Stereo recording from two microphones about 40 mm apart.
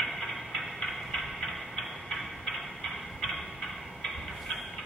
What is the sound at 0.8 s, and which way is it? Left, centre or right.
Tick-tock, centre.